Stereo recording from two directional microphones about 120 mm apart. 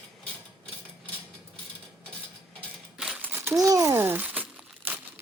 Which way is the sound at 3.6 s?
30° right (ahead or behind).